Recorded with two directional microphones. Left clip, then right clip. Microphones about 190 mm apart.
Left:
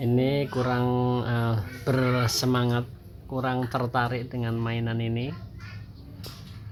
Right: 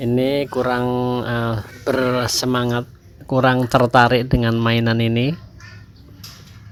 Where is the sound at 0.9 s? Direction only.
30° right (ahead or behind).